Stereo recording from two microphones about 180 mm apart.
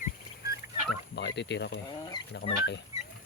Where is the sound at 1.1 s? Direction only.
75° left (ahead or behind).